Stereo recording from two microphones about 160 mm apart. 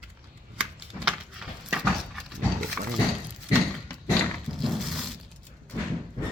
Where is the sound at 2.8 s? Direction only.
5° right (ahead or behind).